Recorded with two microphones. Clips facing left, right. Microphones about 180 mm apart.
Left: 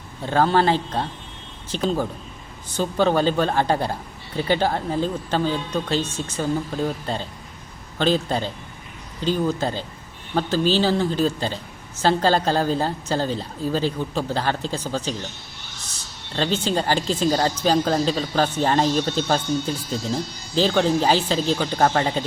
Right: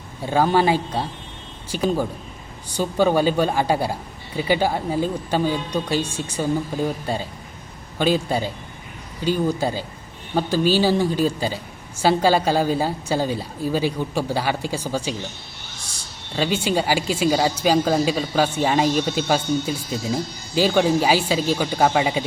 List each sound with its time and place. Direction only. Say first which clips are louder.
0.2 s speech: right 1 dB; 10° right (ahead or behind)
16.3 s speech: right 1 dB; 10° right (ahead or behind)